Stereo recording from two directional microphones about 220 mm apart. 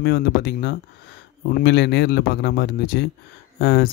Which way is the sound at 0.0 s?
45° left (ahead or behind).